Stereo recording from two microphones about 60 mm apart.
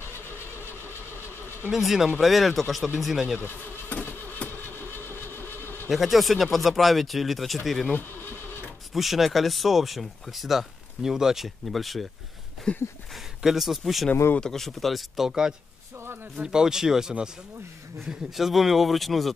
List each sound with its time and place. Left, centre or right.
1.7 s speech: centre
3.3 s insect: left
4.7 s vehicle: left
5.9 s speech: centre
7.9 s a sound: left
8.9 s speech: centre
12.7 s a sound: centre
13.1 s speech: centre